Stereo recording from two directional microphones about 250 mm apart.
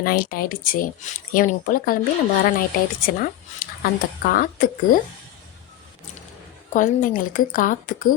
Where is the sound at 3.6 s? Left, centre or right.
Left.